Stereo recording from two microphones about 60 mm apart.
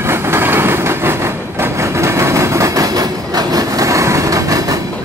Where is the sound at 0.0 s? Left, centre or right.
Right.